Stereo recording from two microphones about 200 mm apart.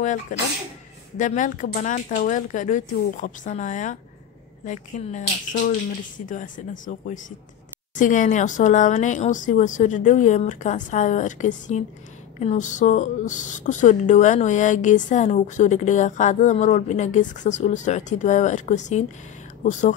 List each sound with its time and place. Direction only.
0.0 s a woman's voice: 40° left (ahead or behind)